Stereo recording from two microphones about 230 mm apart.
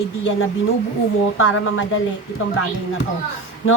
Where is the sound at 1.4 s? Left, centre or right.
Left.